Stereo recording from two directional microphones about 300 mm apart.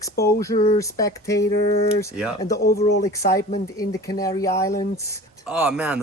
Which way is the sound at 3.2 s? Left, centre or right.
Left.